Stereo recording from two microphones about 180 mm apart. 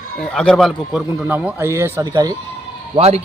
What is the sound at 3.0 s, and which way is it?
Speech, 35° right (ahead or behind).